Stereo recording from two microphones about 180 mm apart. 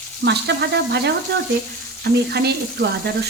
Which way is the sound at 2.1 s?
65° right (ahead or behind).